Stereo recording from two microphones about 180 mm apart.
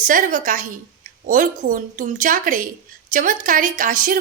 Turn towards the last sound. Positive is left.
turn(degrees=-50)  # may be behind; listen again after turning